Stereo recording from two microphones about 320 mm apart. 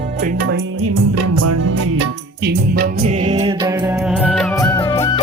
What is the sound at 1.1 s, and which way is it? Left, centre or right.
Music, right.